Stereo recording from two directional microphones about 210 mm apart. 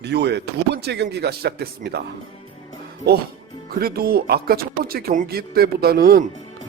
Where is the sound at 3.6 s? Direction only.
45° right (ahead or behind).